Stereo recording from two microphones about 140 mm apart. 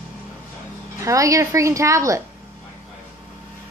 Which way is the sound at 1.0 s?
25° right (ahead or behind).